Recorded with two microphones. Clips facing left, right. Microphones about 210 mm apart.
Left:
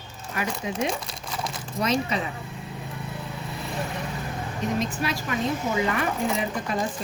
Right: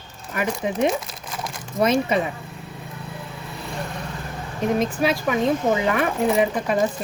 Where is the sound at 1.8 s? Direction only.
55° right (ahead or behind).